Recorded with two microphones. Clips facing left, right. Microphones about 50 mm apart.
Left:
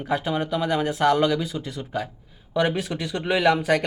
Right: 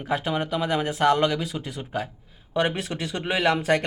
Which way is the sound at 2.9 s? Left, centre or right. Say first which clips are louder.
Left 2 dB; centre.